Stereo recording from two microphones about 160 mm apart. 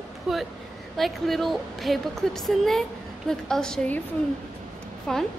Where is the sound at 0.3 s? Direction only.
Centre (ahead or behind).